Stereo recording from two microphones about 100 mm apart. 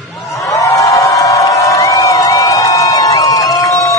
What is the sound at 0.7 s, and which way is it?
Crowd, 35° left (ahead or behind).